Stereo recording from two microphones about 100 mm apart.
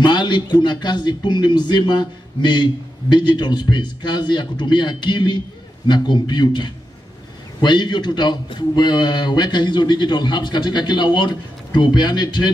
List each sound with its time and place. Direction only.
0.0 s speech: 50° left (ahead or behind)